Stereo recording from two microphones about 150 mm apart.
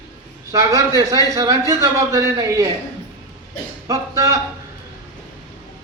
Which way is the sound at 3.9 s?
20° right (ahead or behind).